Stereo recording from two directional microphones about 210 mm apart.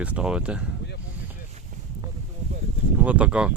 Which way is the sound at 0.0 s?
5° right (ahead or behind).